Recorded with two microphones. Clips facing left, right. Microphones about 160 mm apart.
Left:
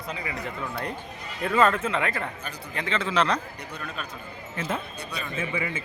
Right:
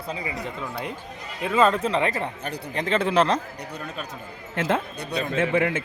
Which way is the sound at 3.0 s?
55° right (ahead or behind).